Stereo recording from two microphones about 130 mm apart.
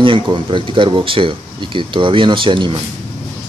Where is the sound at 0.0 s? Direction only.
40° right (ahead or behind).